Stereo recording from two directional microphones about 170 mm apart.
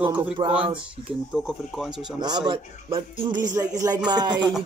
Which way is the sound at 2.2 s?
25° right (ahead or behind).